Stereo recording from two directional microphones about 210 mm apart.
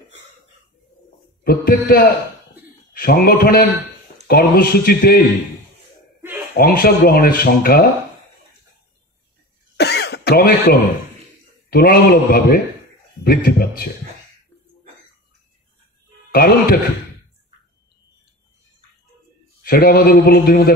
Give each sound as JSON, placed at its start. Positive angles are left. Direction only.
{"t": 1.4, "sound": "a man's voice", "side_deg": 45}
{"t": 6.5, "sound": "speech", "side_deg": 45}
{"t": 9.8, "sound": "throat clearing", "side_deg": 55}
{"t": 11.7, "sound": "speech", "side_deg": 45}
{"t": 16.3, "sound": "speech", "side_deg": 45}
{"t": 19.6, "sound": "speech", "side_deg": 45}